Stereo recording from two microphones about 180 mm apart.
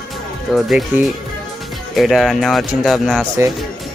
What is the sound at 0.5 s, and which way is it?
Speech, centre (ahead or behind).